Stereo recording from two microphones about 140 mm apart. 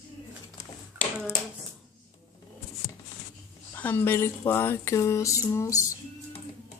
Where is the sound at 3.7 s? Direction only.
15° left (ahead or behind).